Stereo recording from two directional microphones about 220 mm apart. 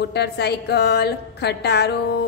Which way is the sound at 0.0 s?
50° left (ahead or behind).